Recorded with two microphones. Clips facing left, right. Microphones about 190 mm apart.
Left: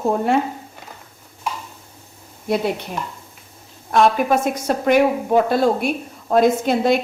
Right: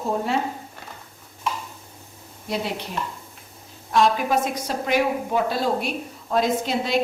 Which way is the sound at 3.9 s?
55° left (ahead or behind).